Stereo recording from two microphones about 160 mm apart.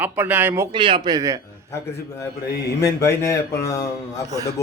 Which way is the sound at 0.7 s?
30° right (ahead or behind).